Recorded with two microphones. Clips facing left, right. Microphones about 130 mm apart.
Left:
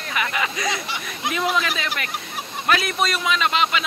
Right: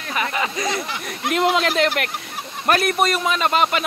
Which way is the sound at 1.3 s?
70° right (ahead or behind).